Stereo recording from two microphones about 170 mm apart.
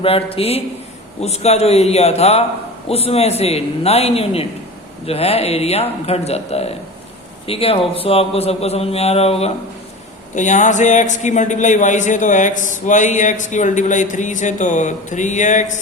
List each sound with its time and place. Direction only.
0.0 s a man's voice: 35° left (ahead or behind)